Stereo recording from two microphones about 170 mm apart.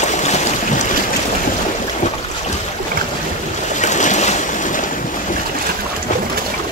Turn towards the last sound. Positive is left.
turn(degrees=45)  # may be behind; listen again after turning